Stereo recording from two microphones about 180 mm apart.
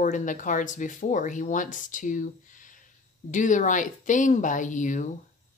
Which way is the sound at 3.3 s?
45° left (ahead or behind).